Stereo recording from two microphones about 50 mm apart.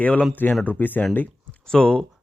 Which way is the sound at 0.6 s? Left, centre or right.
Left.